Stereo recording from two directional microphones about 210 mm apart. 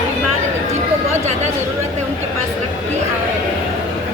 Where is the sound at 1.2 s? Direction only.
35° right (ahead or behind).